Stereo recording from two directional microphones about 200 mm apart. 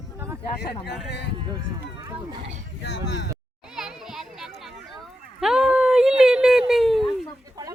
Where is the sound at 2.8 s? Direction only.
60° left (ahead or behind).